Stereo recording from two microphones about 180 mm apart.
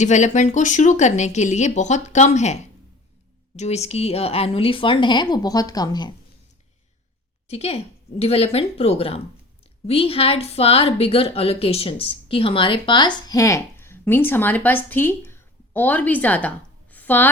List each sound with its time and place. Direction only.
0.0 s a woman's voice: 40° left (ahead or behind); by 6.1 s 25° left (ahead or behind)
7.4 s a woman's voice: 35° left (ahead or behind); by 16.5 s 10° left (ahead or behind)
16.9 s a sound: 10° left (ahead or behind)